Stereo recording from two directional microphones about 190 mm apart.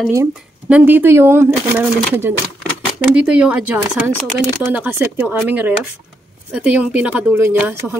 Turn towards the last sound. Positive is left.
turn(degrees=-10)  # may be behind; listen again after turning